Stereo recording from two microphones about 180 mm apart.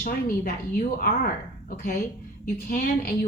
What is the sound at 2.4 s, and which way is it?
Speech, 55° left (ahead or behind).